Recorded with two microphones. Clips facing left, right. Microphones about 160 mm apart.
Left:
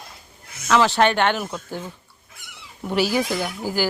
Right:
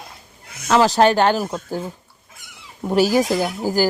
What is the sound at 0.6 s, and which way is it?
Speech, 40° right (ahead or behind).